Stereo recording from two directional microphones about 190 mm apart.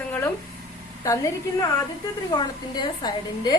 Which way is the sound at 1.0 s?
15° left (ahead or behind).